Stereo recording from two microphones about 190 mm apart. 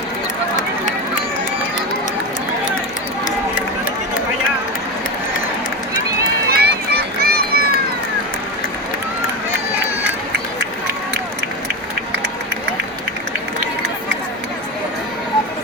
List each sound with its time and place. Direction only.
6.5 s run: 55° right (ahead or behind)